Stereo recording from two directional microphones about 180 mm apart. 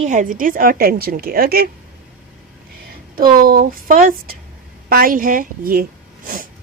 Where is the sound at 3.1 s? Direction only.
55° right (ahead or behind).